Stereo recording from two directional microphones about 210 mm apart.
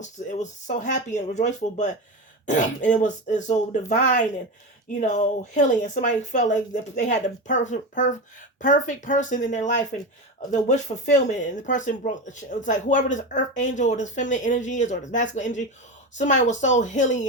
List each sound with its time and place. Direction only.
0.0 s speech: 35° left (ahead or behind)